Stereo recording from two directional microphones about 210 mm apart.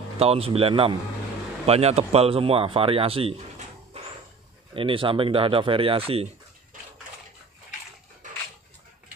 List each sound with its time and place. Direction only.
0.2 s speech: 30° right (ahead or behind)